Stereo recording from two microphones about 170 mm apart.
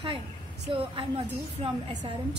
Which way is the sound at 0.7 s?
30° right (ahead or behind).